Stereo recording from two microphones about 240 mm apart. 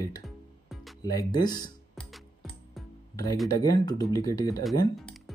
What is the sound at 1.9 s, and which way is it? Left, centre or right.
Music, centre.